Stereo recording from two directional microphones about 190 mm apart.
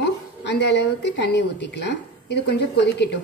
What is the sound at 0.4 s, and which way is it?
A woman's voice, 65° left (ahead or behind).